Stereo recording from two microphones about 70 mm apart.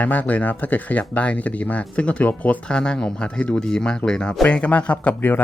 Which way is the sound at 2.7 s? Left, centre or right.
Centre.